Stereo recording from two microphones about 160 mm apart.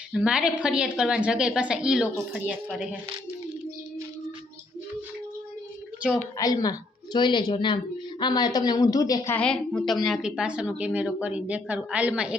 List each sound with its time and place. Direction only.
0.1 s a woman's voice: 5° right (ahead or behind)
6.3 s a woman's voice: 25° left (ahead or behind)
9.3 s a woman's voice: 5° left (ahead or behind)